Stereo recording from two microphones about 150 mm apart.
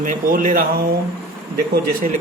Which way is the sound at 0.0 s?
65° right (ahead or behind).